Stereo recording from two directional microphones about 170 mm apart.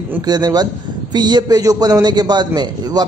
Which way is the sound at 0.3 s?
25° right (ahead or behind).